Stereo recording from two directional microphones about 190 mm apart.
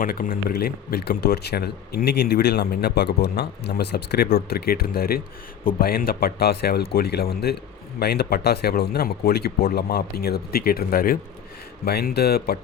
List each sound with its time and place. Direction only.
0.0 s speech: 50° left (ahead or behind)